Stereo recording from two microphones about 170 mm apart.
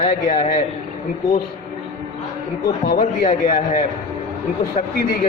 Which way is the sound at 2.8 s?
50° left (ahead or behind).